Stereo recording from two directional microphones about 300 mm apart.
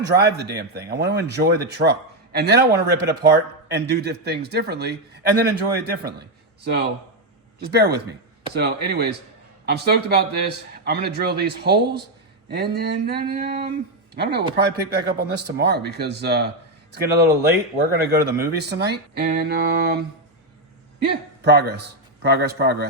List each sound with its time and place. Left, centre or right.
0.1 s speech: right
7.6 s speech: right
21.0 s a man's voice: right